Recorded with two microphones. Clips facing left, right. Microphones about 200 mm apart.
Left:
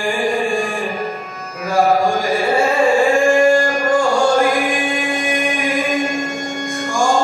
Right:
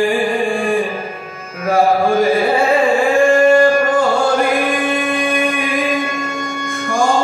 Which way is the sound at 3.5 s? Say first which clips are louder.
Right 3 dB; 60° right (ahead or behind).